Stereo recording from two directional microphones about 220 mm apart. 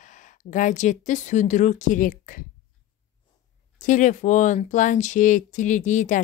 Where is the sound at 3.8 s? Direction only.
35° left (ahead or behind).